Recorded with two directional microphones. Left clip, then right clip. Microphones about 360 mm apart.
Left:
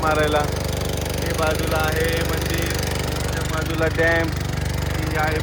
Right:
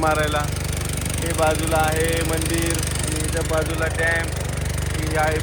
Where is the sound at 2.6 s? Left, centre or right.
Left.